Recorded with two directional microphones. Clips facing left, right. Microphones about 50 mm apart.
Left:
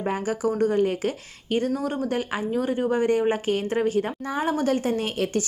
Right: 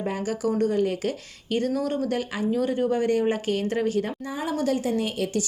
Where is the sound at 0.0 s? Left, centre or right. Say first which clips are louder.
Left 2 dB; left.